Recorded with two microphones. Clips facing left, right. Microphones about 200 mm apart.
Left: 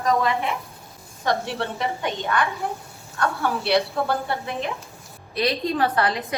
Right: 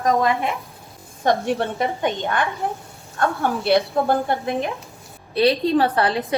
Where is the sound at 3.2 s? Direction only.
50° right (ahead or behind).